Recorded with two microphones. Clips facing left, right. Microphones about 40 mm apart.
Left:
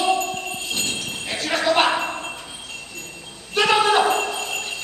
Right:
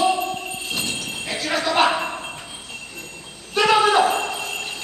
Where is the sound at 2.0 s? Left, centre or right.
Centre.